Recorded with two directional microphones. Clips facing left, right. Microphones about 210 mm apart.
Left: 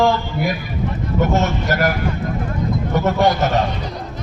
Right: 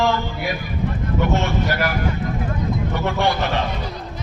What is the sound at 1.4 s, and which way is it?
Speech, 45° left (ahead or behind).